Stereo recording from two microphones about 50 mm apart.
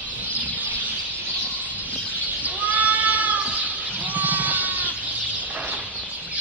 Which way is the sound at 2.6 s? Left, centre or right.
Right.